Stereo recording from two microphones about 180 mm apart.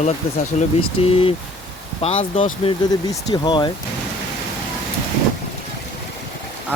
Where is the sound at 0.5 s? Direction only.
40° left (ahead or behind).